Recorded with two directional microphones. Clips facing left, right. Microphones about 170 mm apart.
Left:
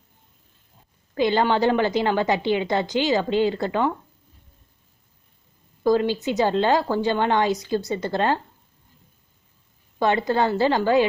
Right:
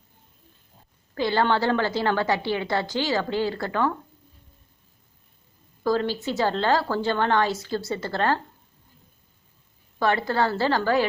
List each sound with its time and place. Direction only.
1.1 s a woman's voice: 20° left (ahead or behind)
5.8 s a woman's voice: 15° left (ahead or behind)
10.0 s a woman's voice: 20° left (ahead or behind)